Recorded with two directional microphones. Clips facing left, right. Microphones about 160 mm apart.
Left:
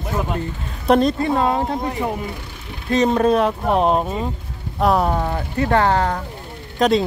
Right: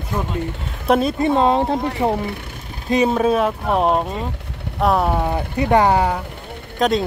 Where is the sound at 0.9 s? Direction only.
5° right (ahead or behind).